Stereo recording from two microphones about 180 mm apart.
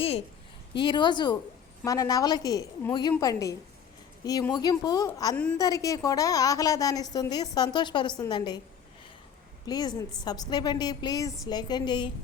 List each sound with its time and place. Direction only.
0.8 s a woman's voice: 25° left (ahead or behind)
9.6 s a woman's voice: 20° left (ahead or behind)